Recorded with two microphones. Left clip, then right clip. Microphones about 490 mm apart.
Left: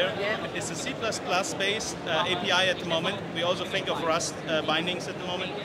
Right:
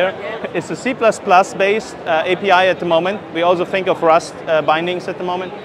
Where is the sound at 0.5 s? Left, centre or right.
Right.